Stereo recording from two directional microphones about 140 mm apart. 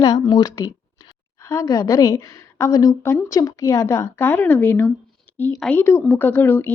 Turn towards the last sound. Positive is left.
turn(degrees=15)  # may be behind; listen again after turning